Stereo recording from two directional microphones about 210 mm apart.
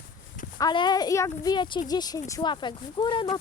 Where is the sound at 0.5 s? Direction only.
20° left (ahead or behind).